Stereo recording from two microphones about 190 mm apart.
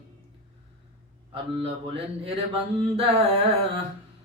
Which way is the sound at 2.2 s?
30° right (ahead or behind).